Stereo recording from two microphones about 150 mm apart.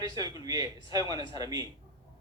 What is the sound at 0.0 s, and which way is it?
A man's voice, 25° right (ahead or behind).